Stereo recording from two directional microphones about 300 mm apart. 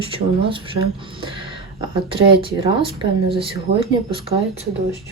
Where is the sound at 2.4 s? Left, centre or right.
Centre.